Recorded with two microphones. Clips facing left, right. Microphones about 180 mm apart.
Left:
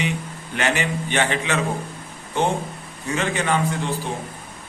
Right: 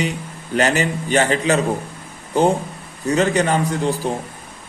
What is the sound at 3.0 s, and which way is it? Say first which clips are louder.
A man's voice: right 6 dB; 40° right (ahead or behind).